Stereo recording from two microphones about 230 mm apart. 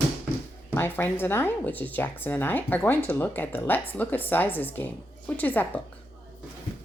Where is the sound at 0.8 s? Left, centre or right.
Centre.